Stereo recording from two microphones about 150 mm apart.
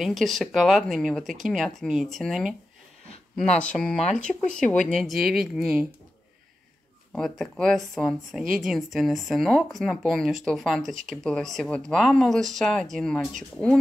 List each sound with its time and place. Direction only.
0.0 s speech: centre (ahead or behind)
7.1 s speech: centre (ahead or behind)